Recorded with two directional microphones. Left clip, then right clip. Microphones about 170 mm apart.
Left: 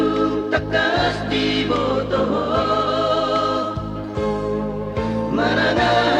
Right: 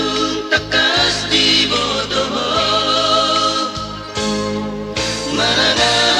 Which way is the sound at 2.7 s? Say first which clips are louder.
Right 4 dB; 15° right (ahead or behind).